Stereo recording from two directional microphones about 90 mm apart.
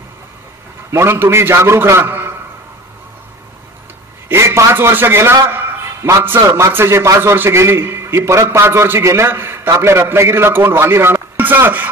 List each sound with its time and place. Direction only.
0.9 s a man's voice: 30° right (ahead or behind)
4.3 s a man's voice: 30° right (ahead or behind)